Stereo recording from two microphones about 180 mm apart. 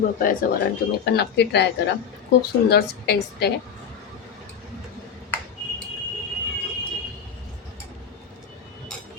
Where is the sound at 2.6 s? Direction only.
65° left (ahead or behind).